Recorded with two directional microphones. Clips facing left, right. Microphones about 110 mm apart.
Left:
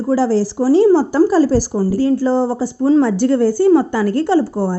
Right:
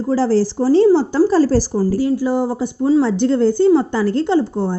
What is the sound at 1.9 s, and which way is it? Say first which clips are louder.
Speech: left 5 dB; 15° right (ahead or behind).